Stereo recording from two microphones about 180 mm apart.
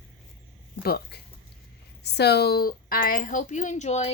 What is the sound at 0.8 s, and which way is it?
Speech, 60° left (ahead or behind).